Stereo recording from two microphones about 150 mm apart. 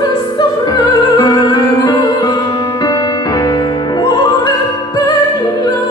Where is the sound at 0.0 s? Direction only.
30° left (ahead or behind).